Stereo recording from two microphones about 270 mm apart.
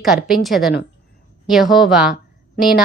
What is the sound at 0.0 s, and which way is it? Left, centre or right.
A woman's voice, centre.